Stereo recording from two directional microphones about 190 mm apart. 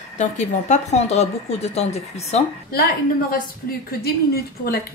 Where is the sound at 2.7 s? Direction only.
50° left (ahead or behind).